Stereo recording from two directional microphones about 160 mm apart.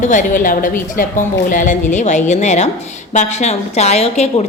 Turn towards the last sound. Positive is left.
turn(degrees=40)  # may be behind; listen again after turning